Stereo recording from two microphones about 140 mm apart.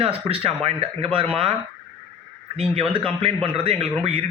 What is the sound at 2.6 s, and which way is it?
Speech, 40° right (ahead or behind).